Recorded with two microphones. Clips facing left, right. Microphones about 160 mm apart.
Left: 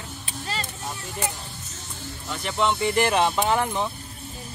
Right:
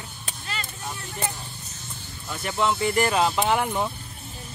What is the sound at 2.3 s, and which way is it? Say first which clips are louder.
Speech: even; 5° right (ahead or behind).